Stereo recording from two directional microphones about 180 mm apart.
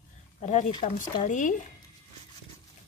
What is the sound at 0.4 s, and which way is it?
Speech, 40° left (ahead or behind).